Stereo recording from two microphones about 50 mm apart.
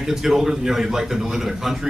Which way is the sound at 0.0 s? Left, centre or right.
Centre.